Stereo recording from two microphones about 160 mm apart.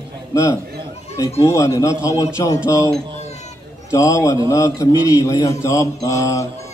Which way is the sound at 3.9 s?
20° left (ahead or behind).